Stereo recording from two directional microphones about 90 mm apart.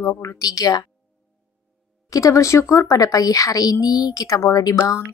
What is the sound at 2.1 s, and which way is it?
A woman's voice, 35° left (ahead or behind).